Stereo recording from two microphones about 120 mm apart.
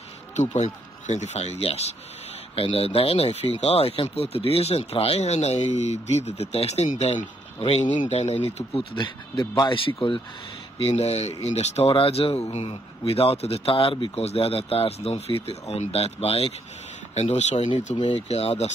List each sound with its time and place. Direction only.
0.4 s speech: 70° left (ahead or behind)
8.7 s speech: 40° left (ahead or behind)
10.8 s speech: 60° left (ahead or behind)
11.9 s speech: 50° left (ahead or behind)